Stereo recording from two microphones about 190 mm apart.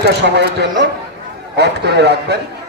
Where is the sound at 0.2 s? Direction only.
65° right (ahead or behind).